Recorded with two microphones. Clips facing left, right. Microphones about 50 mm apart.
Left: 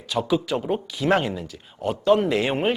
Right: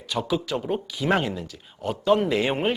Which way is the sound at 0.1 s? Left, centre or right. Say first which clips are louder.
Left 3 dB; centre.